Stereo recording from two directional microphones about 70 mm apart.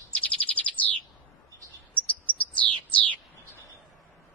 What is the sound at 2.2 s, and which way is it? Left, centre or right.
Bird, left.